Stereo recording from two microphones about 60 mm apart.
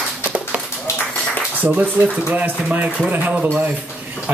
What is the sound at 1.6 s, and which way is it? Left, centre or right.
Speech, right.